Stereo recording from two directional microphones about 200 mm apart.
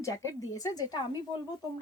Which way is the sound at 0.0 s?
15° left (ahead or behind).